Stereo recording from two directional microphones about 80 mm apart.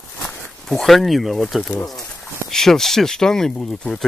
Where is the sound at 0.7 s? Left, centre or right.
Centre.